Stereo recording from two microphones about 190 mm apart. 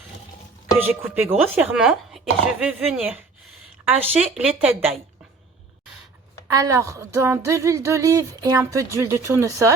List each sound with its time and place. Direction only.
0.8 s speech: 10° right (ahead or behind)
6.5 s speech: 15° right (ahead or behind)